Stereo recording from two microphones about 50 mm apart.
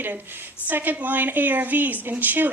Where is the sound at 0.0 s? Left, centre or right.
Right.